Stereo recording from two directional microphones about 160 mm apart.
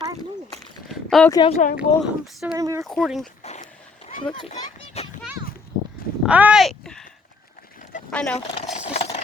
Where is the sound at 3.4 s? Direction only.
45° left (ahead or behind).